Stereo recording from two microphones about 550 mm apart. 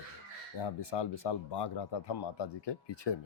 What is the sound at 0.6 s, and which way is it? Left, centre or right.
Speech, left.